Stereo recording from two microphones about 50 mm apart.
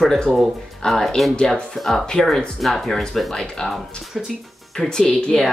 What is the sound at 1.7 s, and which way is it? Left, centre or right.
Speech, centre.